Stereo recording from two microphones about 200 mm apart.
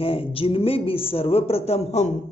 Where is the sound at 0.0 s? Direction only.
25° left (ahead or behind).